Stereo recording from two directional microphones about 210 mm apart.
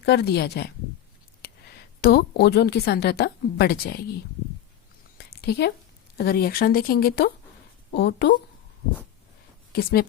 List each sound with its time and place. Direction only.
0.0 s a woman's voice: 50° left (ahead or behind)
5.1 s a sound: 50° left (ahead or behind)
6.1 s a woman's voice: 50° left (ahead or behind)
9.7 s speech: 45° left (ahead or behind)